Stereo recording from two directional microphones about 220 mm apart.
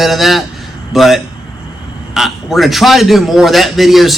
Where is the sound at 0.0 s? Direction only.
Centre (ahead or behind).